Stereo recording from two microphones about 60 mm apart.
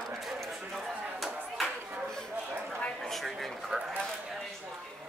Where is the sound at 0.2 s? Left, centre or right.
Centre.